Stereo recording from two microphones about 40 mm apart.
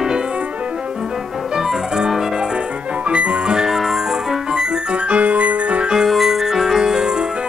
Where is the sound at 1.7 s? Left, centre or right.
Centre.